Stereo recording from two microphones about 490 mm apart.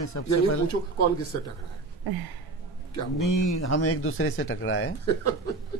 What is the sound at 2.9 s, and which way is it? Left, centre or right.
Speech, left.